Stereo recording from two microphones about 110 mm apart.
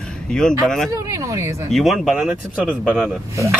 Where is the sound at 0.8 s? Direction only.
30° right (ahead or behind).